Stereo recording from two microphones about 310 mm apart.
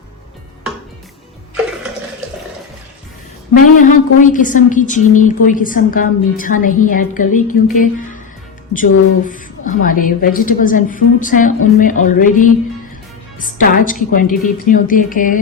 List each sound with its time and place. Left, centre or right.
3.8 s a woman's voice: left